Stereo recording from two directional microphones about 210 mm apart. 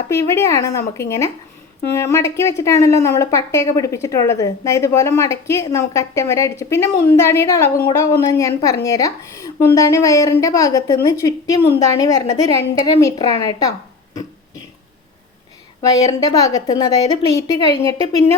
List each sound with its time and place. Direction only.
0.1 s a woman's voice: 15° left (ahead or behind)
15.8 s a woman's voice: 15° left (ahead or behind)